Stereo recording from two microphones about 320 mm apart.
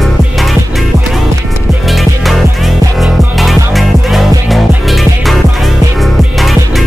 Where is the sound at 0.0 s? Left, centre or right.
Centre.